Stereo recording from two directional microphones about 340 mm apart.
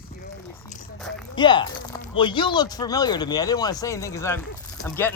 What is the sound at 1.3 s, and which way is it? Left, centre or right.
Speech, centre.